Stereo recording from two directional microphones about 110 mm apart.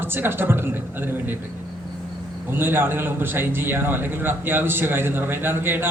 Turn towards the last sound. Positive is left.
turn(degrees=-20)  # may be behind; listen again after turning